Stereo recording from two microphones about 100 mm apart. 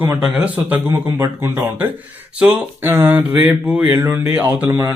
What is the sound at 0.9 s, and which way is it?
Speech, 30° right (ahead or behind).